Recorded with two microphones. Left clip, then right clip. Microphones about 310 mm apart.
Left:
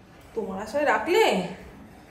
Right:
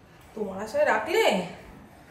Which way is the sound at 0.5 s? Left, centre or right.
Centre.